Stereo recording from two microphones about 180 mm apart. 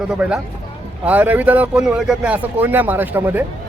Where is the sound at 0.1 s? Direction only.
5° right (ahead or behind).